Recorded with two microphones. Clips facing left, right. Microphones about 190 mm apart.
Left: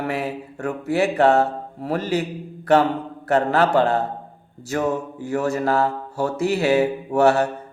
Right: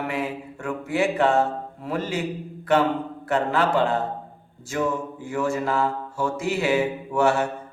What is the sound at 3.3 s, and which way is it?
Mantra, 40° left (ahead or behind).